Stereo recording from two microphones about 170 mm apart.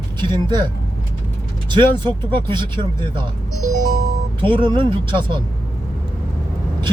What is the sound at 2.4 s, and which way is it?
Speech, 30° right (ahead or behind).